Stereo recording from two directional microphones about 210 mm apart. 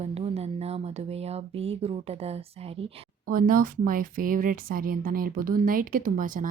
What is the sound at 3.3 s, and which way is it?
Speech, 40° right (ahead or behind).